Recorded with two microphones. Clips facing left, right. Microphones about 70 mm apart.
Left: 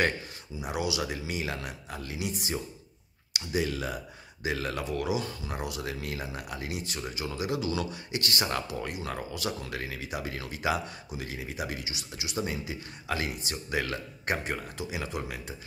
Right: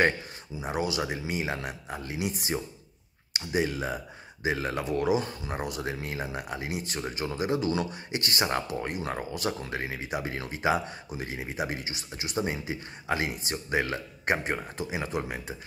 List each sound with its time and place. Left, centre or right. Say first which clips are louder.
0.6 s speech: right 2 dB; right
3.3 s speech: right 2 dB; right
6.7 s speech: right 3 dB; right